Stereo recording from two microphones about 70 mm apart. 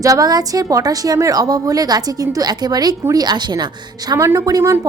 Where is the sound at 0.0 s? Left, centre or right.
Right.